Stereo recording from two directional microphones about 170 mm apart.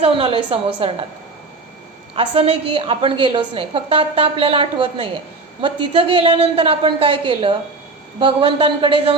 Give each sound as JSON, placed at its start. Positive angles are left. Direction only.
{"t": 0.0, "sound": "a woman's voice", "side_deg": -35}
{"t": 2.1, "sound": "a woman's voice", "side_deg": -35}